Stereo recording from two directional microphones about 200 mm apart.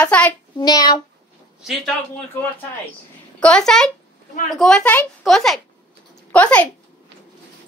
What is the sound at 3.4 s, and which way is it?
A woman's voice, 5° left (ahead or behind).